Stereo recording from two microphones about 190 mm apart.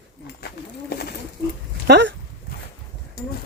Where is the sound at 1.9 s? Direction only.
65° right (ahead or behind).